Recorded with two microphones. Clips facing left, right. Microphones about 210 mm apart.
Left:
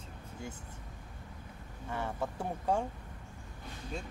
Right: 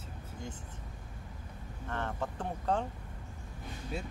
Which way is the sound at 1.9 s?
10° left (ahead or behind).